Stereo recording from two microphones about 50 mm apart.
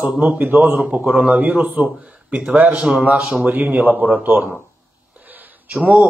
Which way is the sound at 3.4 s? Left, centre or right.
Right.